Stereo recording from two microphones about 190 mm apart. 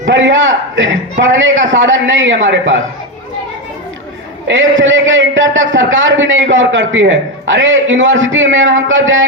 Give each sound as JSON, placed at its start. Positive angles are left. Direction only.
{"t": 0.1, "sound": "a man's voice", "side_deg": -80}
{"t": 4.4, "sound": "a man's voice", "side_deg": -80}